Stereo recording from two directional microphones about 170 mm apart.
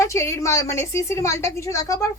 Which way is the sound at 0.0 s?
15° left (ahead or behind).